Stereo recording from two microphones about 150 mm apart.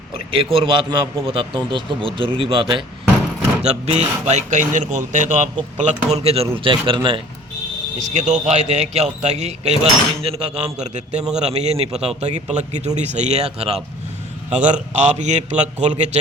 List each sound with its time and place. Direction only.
0.3 s a man's voice: 35° right (ahead or behind)
3.6 s a man's voice: 45° right (ahead or behind)
7.9 s speech: 55° right (ahead or behind)